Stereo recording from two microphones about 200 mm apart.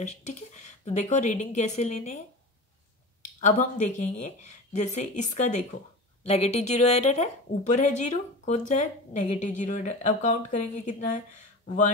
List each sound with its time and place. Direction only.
0.0 s a woman's voice: 35° left (ahead or behind)
3.3 s a woman's voice: 40° left (ahead or behind)